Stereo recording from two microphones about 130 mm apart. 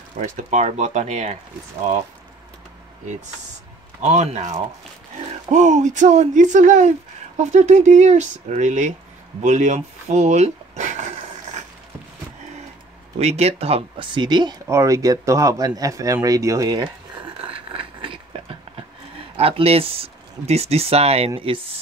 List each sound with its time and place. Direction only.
0.2 s speech: 70° right (ahead or behind)
4.0 s speech: 65° right (ahead or behind)
7.3 s speech: 60° right (ahead or behind)
9.4 s dog: 65° right (ahead or behind)
13.2 s speech: 55° right (ahead or behind); by 14.6 s 35° right (ahead or behind)
14.7 s speech: 25° right (ahead or behind)
17.4 s a sound: 45° right (ahead or behind)
19.1 s speech: 45° right (ahead or behind)